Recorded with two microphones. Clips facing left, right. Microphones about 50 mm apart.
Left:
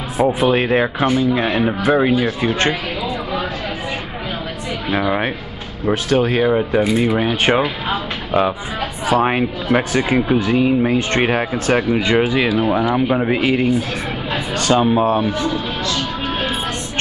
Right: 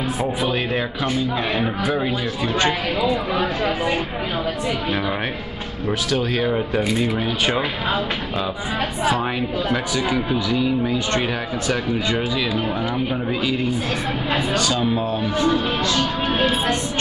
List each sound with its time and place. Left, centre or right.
0.2 s speech: left
4.9 s speech: left
6.0 s speech: left
6.5 s speech: centre
7.2 s speech: left
9.1 s speech: left
12.5 s speech: left